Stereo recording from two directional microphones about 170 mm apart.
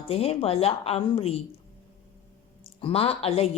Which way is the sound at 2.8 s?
35° left (ahead or behind).